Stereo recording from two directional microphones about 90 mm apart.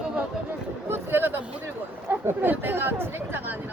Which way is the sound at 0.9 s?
25° right (ahead or behind).